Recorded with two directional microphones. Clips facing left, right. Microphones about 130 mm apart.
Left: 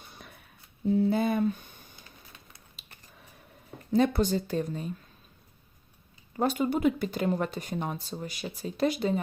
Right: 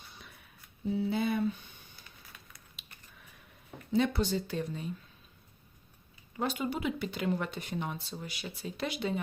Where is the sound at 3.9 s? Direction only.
45° left (ahead or behind).